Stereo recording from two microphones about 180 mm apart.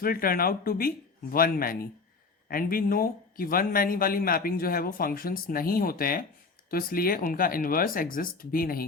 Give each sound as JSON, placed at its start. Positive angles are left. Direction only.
{"t": 0.0, "sound": "speech", "side_deg": 55}